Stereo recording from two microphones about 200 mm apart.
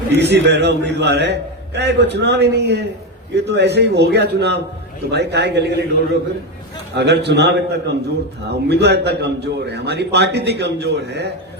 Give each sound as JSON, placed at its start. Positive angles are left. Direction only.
{"t": 0.1, "sound": "a man's voice", "side_deg": -60}
{"t": 6.9, "sound": "a man's voice", "side_deg": -55}